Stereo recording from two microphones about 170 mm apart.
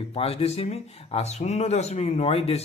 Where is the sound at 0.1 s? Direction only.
35° left (ahead or behind).